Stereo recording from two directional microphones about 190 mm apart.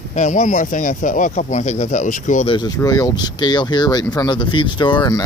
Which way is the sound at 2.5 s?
20° left (ahead or behind).